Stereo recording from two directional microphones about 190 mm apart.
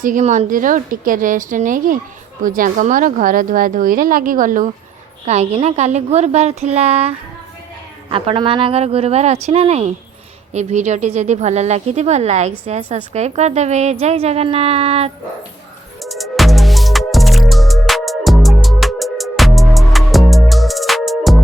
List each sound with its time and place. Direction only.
0.0 s a woman's voice: 40° right (ahead or behind)
5.2 s speech: 35° right (ahead or behind)
8.1 s speech: 30° right (ahead or behind)
16.0 s music: centre (ahead or behind)